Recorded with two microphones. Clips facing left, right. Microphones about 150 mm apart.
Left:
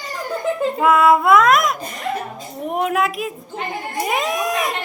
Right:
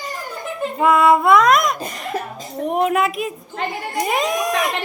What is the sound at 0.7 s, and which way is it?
A woman's voice, centre (ahead or behind).